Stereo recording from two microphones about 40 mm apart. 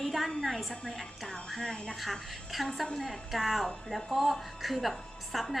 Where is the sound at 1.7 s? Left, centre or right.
Left.